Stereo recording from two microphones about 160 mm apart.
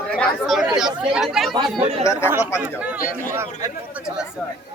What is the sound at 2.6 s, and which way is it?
Speech, 10° right (ahead or behind).